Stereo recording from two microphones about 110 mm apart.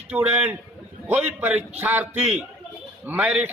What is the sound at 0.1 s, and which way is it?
Speech, 15° right (ahead or behind).